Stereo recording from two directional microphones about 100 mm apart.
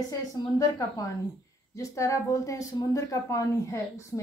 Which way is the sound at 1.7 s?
30° left (ahead or behind).